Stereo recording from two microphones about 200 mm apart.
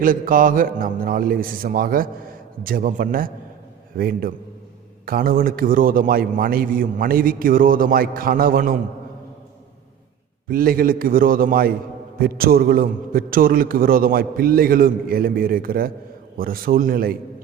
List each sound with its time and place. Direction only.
0.0 s a man's voice: 45° right (ahead or behind)
10.5 s a man's voice: 45° right (ahead or behind)